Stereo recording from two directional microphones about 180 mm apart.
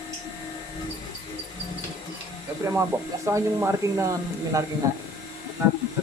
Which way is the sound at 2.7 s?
15° right (ahead or behind).